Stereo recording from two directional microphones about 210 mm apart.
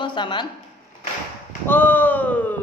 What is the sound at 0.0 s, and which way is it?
Speech, 20° left (ahead or behind).